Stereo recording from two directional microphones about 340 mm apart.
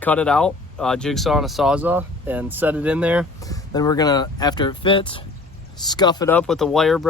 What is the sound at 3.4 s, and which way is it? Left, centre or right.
Speech, centre.